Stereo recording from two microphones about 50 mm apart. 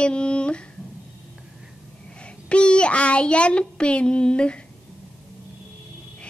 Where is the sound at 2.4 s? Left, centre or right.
Left.